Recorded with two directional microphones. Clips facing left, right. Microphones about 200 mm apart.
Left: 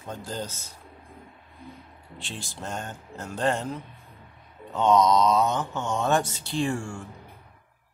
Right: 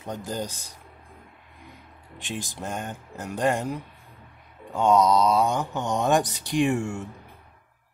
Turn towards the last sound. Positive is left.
turn(degrees=-20)  # may be behind; listen again after turning